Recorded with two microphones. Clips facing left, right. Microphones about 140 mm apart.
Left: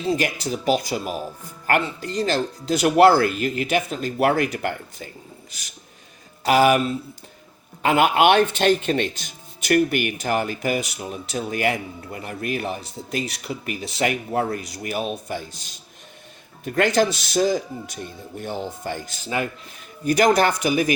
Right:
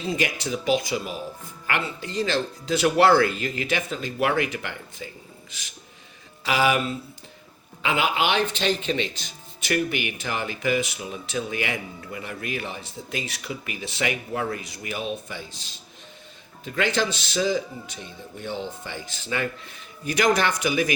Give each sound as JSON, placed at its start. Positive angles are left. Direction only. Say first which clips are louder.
{"t": 0.1, "sound": "speech", "louder": "left 3 dB", "side_deg": 40}
{"t": 6.4, "sound": "speech", "louder": "left 6 dB", "side_deg": 45}
{"t": 16.6, "sound": "speech", "louder": "left 5 dB", "side_deg": 50}